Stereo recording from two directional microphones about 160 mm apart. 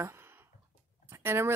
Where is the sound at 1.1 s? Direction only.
15° right (ahead or behind).